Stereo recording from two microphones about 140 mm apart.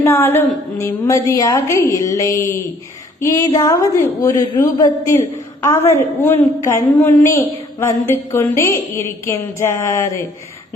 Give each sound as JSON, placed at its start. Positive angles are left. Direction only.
{"t": 0.0, "sound": "a woman's voice", "side_deg": 20}